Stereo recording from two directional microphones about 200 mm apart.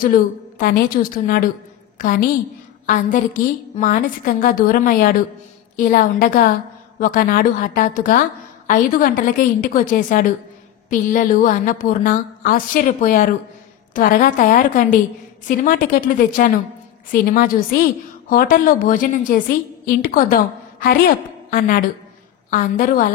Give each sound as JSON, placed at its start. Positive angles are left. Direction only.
{"t": 0.0, "sound": "a woman's voice", "side_deg": 45}
{"t": 3.7, "sound": "a woman's voice", "side_deg": 45}